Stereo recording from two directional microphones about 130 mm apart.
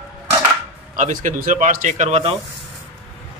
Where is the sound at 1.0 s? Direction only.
80° right.